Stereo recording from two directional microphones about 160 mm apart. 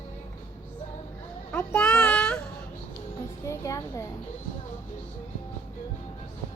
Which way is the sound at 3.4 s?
20° left (ahead or behind).